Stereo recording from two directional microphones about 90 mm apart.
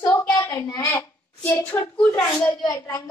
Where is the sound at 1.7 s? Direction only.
40° left (ahead or behind).